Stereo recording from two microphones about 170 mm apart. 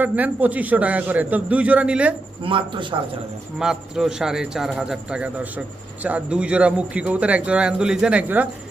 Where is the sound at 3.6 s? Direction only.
5° right (ahead or behind).